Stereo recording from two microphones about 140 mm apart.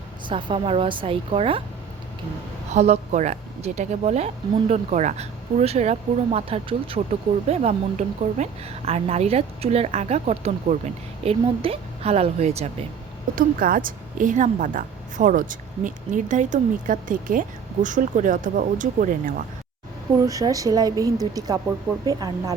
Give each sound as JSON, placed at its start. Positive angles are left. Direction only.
{"t": 0.3, "sound": "a woman's voice", "side_deg": -35}
{"t": 2.7, "sound": "a woman's voice", "side_deg": -50}
{"t": 13.3, "sound": "a woman's voice", "side_deg": -90}
{"t": 20.1, "sound": "a woman's voice", "side_deg": -25}